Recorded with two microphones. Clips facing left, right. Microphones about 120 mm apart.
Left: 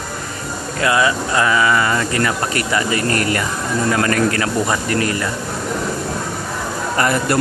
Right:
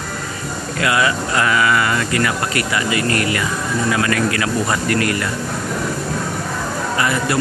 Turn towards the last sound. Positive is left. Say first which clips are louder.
# left 2 dB
turn(degrees=40)  # may be behind; listen again after turning